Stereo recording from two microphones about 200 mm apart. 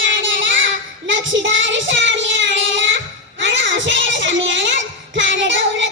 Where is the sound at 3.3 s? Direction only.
65° right (ahead or behind).